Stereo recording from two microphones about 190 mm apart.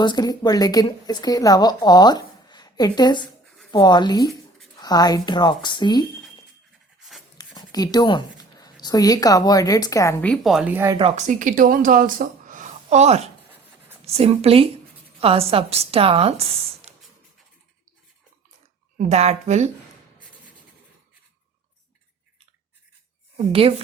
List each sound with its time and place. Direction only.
0.0 s speech: 20° left (ahead or behind)
7.3 s speech: 20° left (ahead or behind); by 10.9 s 10° right (ahead or behind)
10.9 s a woman's voice: 35° right (ahead or behind)
16.9 s a sound: 35° right (ahead or behind)
18.9 s a woman's voice: 35° right (ahead or behind)
23.5 s speech: 30° right (ahead or behind)